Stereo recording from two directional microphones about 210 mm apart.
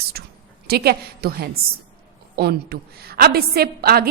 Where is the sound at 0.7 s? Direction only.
50° right (ahead or behind).